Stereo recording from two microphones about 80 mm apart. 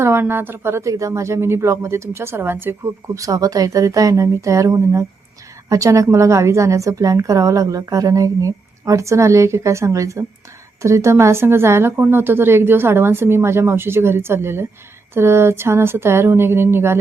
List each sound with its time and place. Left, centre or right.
0.0 s a woman's voice: right
3.2 s a woman's voice: right